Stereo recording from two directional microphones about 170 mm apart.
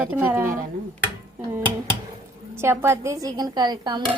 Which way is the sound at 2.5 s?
15° right (ahead or behind).